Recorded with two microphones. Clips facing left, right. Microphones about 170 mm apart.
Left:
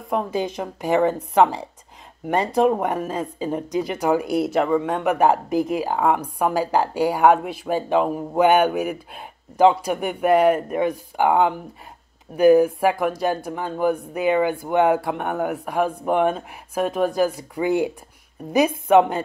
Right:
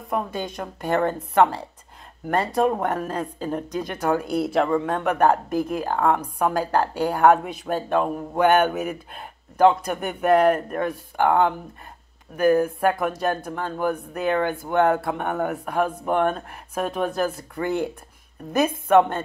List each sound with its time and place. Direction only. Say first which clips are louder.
0.6 s speech: left 2 dB; 5° left (ahead or behind)
2.6 s speech: left 4 dB; 10° left (ahead or behind)